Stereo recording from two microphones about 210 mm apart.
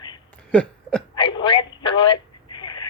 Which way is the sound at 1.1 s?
25° left (ahead or behind).